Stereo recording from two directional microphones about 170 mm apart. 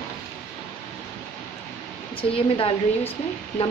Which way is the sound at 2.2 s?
30° left (ahead or behind).